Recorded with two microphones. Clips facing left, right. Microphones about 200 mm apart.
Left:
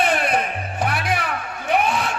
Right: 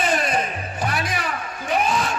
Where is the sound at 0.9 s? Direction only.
60° left (ahead or behind).